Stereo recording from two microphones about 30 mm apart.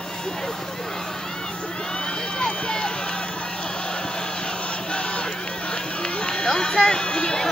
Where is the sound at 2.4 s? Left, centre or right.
Left.